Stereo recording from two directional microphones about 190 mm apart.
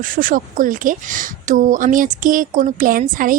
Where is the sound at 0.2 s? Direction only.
45° right (ahead or behind).